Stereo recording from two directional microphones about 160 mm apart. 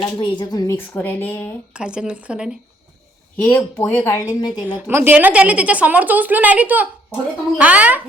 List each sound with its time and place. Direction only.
0.0 s speech: 30° left (ahead or behind)
0.8 s a woman's voice: 15° left (ahead or behind)
1.7 s speech: 5° right (ahead or behind)
3.3 s a woman's voice: 10° left (ahead or behind)
4.7 s a woman's voice: 15° right (ahead or behind)